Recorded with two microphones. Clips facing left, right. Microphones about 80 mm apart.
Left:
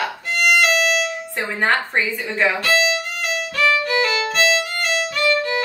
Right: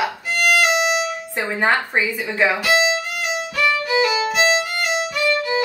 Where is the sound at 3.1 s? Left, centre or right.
Centre.